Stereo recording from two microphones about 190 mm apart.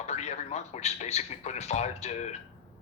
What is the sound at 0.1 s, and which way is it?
Speech, 35° left (ahead or behind).